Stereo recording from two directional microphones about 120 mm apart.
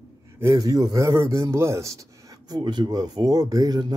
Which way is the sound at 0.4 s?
30° right (ahead or behind).